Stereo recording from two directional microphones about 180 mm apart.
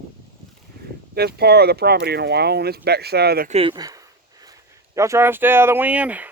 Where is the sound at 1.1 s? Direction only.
60° right (ahead or behind).